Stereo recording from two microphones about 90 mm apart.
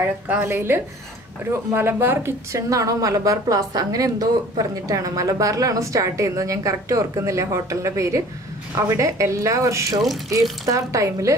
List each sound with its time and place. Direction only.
0.3 s a woman's voice: 25° right (ahead or behind)